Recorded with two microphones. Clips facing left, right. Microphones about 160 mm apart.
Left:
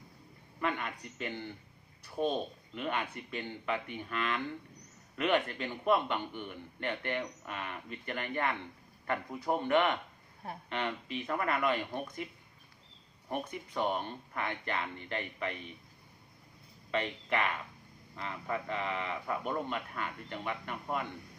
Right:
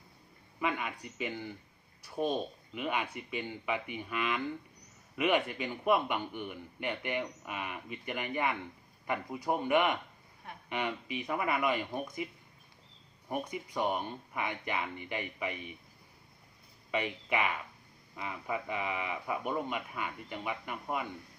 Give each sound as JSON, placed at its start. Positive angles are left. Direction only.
{"t": 0.6, "sound": "a man's voice", "side_deg": -10}
{"t": 16.9, "sound": "a man's voice", "side_deg": -10}